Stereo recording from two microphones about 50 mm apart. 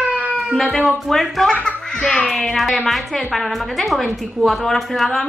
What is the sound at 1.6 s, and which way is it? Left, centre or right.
A woman's voice, centre.